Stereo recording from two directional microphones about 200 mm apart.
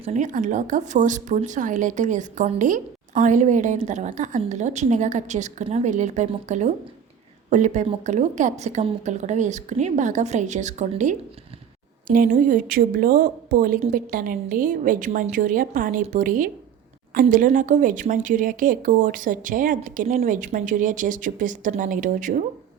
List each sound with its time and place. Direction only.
0.0 s a woman's voice: 35° right (ahead or behind)